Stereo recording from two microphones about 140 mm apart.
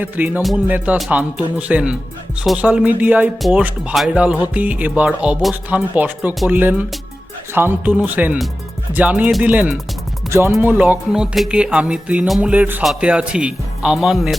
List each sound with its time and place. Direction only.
0.0 s speech: 15° right (ahead or behind)